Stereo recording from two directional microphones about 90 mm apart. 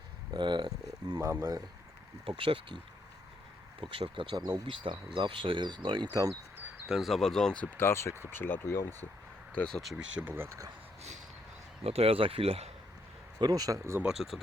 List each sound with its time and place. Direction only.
0.3 s speech: 60° right (ahead or behind)
1.2 s speech: 30° right (ahead or behind)
2.2 s speech: 85° right
3.8 s speech: 75° right (ahead or behind)
4.4 s speech: 45° right (ahead or behind)
4.7 s speech: 75° right (ahead or behind)
5.1 s speech: 65° right (ahead or behind)
6.8 s speech: 5° right (ahead or behind); by 9.0 s 25° left (ahead or behind)
9.6 s speech: 5° left (ahead or behind)
10.2 s speech: 25° right (ahead or behind)
11.8 s speech: 90° right
13.4 s speech: 45° right (ahead or behind)
14.0 s speech: 5° right (ahead or behind)